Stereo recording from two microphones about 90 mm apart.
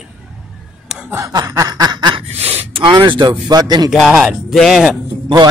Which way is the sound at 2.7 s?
75° right (ahead or behind).